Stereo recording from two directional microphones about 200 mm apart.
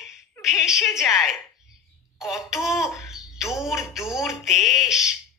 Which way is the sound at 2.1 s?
Centre (ahead or behind).